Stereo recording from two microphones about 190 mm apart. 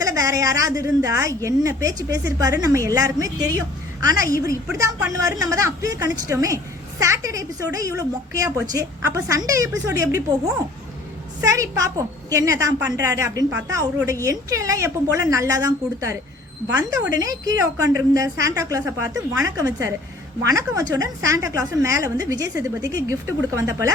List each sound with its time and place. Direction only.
0.0 s a woman's voice: 20° right (ahead or behind)
17.2 s a woman's voice: 20° right (ahead or behind)